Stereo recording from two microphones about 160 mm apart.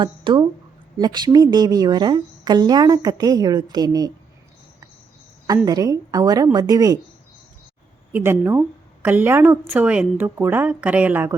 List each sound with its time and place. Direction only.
0.0 s a woman's voice: 30° right (ahead or behind)
5.6 s a woman's voice: 20° right (ahead or behind)
8.1 s a woman's voice: 15° right (ahead or behind)